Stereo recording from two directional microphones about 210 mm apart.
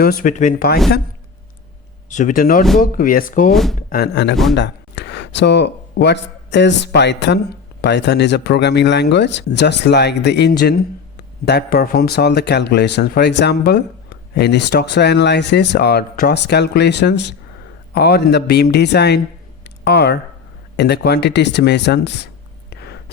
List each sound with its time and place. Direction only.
0.0 s speech: 45° left (ahead or behind)
2.0 s speech: 35° left (ahead or behind)
3.5 s speech: centre (ahead or behind)
3.8 s speech: 45° left (ahead or behind)
22.7 s a sound: 50° left (ahead or behind)